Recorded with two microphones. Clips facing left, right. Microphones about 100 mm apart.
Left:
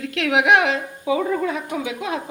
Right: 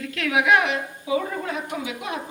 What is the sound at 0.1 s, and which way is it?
Speech, 70° left (ahead or behind).